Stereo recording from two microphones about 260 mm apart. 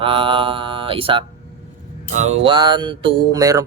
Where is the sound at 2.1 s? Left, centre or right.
Right.